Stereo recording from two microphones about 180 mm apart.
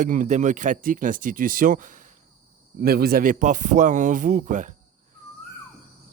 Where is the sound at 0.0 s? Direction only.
45° right (ahead or behind).